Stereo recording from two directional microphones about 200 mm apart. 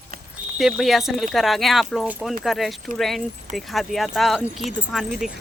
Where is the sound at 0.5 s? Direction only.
Centre (ahead or behind).